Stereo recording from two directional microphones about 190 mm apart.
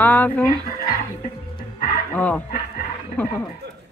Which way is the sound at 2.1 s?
5° left (ahead or behind).